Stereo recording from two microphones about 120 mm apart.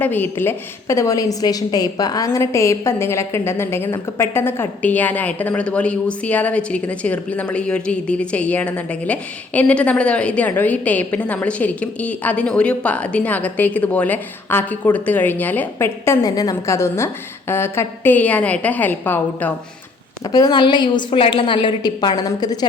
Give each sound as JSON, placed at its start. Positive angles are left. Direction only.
{"t": 0.0, "sound": "a woman's voice", "side_deg": 15}
{"t": 16.2, "sound": "a woman's voice", "side_deg": 35}
{"t": 20.2, "sound": "a woman's voice", "side_deg": 35}